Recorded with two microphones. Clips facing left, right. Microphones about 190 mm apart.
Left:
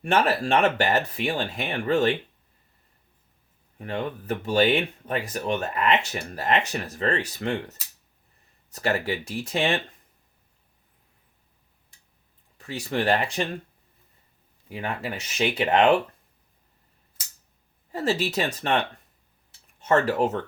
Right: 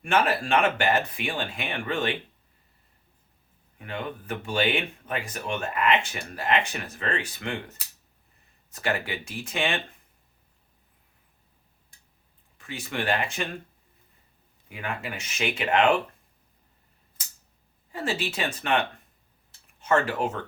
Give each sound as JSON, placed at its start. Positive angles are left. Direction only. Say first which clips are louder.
{"t": 0.0, "sound": "speech", "louder": "left 2 dB", "side_deg": 35}
{"t": 3.8, "sound": "speech", "louder": "left 4 dB", "side_deg": 40}
{"t": 8.7, "sound": "speech", "louder": "left 3 dB", "side_deg": 40}
{"t": 12.5, "sound": "speech", "louder": "left 5 dB", "side_deg": 40}
{"t": 14.7, "sound": "speech", "louder": "left 3 dB", "side_deg": 35}
{"t": 17.9, "sound": "speech", "louder": "left 5 dB", "side_deg": 40}